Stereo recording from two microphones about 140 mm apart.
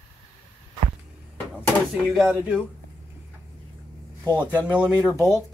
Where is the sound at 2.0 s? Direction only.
Centre (ahead or behind).